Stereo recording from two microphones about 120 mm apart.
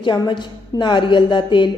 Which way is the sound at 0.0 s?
40° left (ahead or behind).